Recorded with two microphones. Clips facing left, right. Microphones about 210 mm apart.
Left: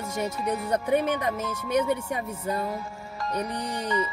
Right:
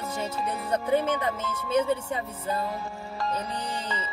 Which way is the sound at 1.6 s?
30° right (ahead or behind).